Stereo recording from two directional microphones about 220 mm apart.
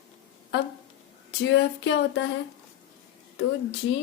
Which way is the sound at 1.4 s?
55° left (ahead or behind).